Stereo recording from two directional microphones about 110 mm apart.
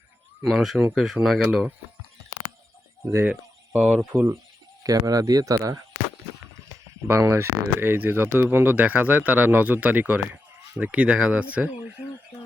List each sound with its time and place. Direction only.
0.4 s speech: centre (ahead or behind)
3.2 s speech: 15° right (ahead or behind)
4.8 s speech: 35° right (ahead or behind)
7.1 s speech: 20° right (ahead or behind)